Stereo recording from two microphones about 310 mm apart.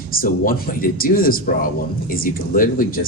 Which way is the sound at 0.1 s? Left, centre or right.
Left.